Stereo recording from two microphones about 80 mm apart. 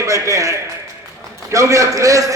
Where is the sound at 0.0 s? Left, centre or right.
Right.